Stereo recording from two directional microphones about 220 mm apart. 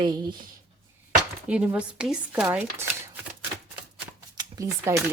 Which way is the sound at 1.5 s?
5° right (ahead or behind).